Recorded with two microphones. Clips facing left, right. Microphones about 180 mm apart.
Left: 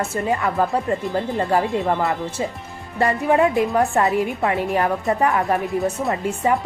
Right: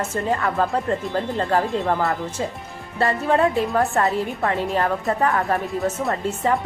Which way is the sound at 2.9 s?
15° left (ahead or behind).